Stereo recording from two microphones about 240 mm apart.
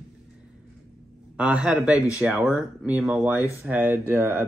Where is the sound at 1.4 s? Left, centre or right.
Centre.